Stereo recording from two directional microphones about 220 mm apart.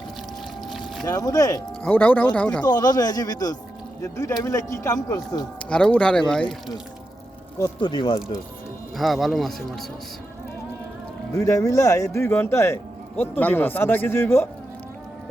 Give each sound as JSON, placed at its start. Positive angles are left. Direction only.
{"t": 1.0, "sound": "speech", "side_deg": 15}
{"t": 2.6, "sound": "speech", "side_deg": 15}
{"t": 5.7, "sound": "speech", "side_deg": 5}
{"t": 7.8, "sound": "speech", "side_deg": 20}
{"t": 9.0, "sound": "speech", "side_deg": 0}
{"t": 11.3, "sound": "speech", "side_deg": 15}